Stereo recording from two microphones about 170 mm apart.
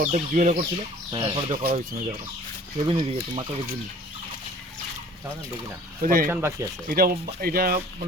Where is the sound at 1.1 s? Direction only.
30° right (ahead or behind).